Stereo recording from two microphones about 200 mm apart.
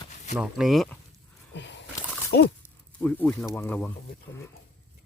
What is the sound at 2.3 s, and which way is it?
Speech, 55° left (ahead or behind).